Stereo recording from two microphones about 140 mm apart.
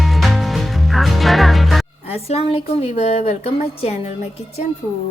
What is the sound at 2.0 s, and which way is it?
A woman's voice, 45° left (ahead or behind).